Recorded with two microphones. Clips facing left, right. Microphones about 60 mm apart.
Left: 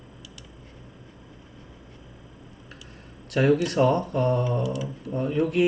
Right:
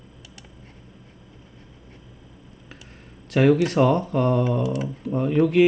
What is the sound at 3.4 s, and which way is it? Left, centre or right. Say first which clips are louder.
Speech: right 3 dB; right.